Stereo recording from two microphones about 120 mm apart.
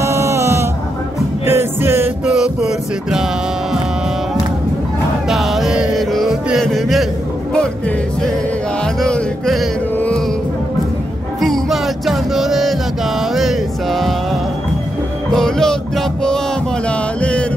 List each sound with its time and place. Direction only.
0.0 s music: 25° right (ahead or behind)
2.2 s music: 5° right (ahead or behind)
5.3 s music: centre (ahead or behind)
9.0 s music: centre (ahead or behind)
11.4 s music: centre (ahead or behind)
15.3 s music: 5° left (ahead or behind)
17.2 s mantra: 10° left (ahead or behind)